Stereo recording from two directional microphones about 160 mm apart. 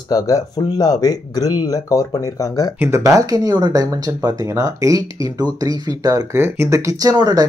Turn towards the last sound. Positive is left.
turn(degrees=-25)  # may be behind; listen again after turning